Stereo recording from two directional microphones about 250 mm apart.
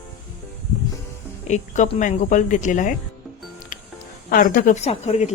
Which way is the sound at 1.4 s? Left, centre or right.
Left.